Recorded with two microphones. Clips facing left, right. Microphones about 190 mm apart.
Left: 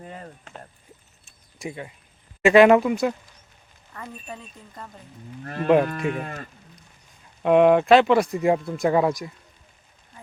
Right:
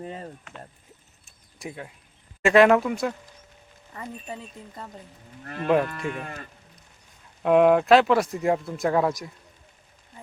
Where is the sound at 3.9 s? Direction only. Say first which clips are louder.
Right 1 dB; 15° right (ahead or behind).